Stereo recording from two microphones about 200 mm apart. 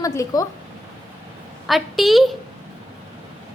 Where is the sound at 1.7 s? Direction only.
Centre (ahead or behind).